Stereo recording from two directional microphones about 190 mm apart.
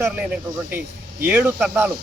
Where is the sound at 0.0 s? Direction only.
5° right (ahead or behind).